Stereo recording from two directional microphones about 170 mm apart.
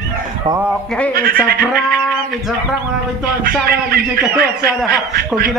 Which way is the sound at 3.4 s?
60° right (ahead or behind).